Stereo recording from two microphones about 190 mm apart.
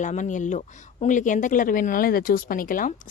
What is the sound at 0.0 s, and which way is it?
Speech, 40° left (ahead or behind).